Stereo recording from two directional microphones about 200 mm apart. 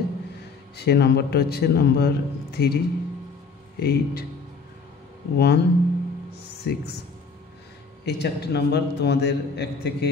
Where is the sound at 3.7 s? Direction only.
50° left (ahead or behind).